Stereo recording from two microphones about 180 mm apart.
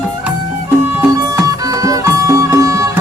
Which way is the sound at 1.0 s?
20° right (ahead or behind).